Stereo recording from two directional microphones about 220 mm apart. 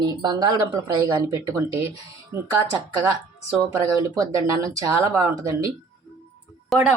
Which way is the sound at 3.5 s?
15° right (ahead or behind).